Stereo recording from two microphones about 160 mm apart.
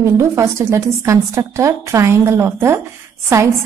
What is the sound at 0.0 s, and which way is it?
A woman's voice, 15° right (ahead or behind).